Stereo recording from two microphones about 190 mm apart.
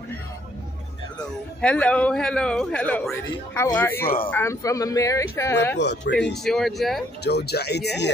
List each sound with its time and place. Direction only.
1.6 s a man's voice: 5° left (ahead or behind)
5.8 s speech: 65° left (ahead or behind)
6.3 s a man's voice: centre (ahead or behind)
7.2 s speech: 60° left (ahead or behind)